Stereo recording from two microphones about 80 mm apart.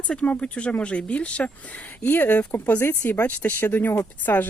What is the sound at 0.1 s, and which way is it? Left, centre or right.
Speech, centre.